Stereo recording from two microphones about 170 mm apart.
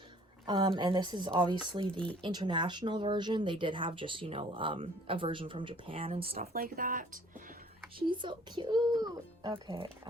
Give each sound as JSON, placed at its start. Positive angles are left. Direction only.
{"t": 0.4, "sound": "speech", "side_deg": -25}
{"t": 6.3, "sound": "speech", "side_deg": -60}
{"t": 7.9, "sound": "speech", "side_deg": -30}